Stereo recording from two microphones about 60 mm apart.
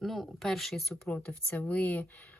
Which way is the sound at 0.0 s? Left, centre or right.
Centre.